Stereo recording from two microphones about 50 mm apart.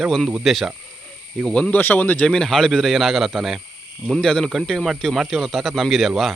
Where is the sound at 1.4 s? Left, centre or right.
Centre.